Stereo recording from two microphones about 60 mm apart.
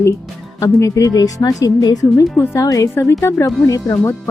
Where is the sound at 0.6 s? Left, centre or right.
Left.